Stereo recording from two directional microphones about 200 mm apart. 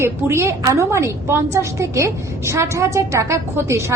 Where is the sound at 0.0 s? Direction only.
15° right (ahead or behind).